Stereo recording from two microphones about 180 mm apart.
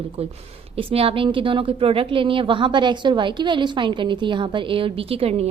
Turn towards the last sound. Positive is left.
turn(degrees=-35)  # may be behind; listen again after turning